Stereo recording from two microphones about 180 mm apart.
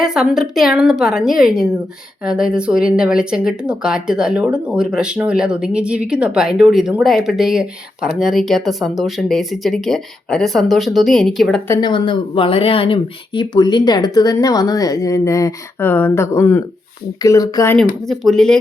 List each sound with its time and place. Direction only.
0.0 s speech: 5° right (ahead or behind)
11.7 s speech: 25° left (ahead or behind)
17.7 s speech: centre (ahead or behind)